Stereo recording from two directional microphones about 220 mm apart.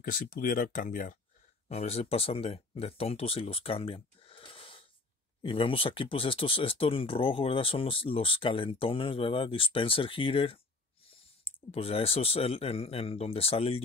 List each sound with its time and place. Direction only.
0.0 s speech: 40° left (ahead or behind)